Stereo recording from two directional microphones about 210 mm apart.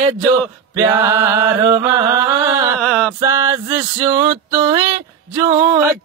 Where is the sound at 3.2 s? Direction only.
15° right (ahead or behind).